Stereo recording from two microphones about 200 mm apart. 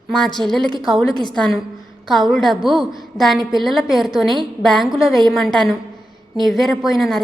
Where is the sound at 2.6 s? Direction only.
25° right (ahead or behind).